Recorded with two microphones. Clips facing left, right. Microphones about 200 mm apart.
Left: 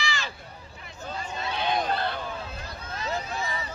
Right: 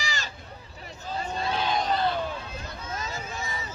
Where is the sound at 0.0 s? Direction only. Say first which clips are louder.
Left 2 dB; 40° right (ahead or behind).